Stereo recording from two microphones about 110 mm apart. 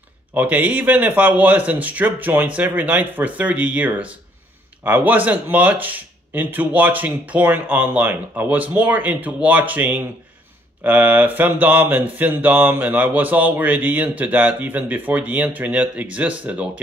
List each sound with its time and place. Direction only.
0.3 s speech: 15° right (ahead or behind)